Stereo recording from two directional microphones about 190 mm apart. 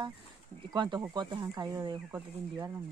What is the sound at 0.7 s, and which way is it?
Speech, 25° right (ahead or behind).